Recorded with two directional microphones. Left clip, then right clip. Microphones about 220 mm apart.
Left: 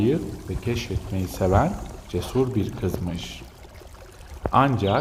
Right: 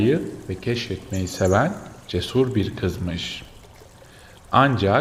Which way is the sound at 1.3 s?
40° right (ahead or behind).